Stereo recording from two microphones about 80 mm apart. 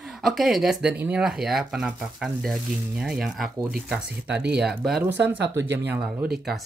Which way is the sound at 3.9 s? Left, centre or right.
Centre.